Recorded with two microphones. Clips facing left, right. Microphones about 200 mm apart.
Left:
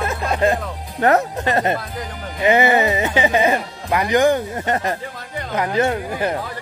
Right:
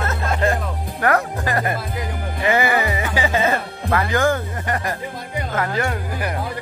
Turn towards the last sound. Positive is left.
turn(degrees=25)  # may be behind; listen again after turning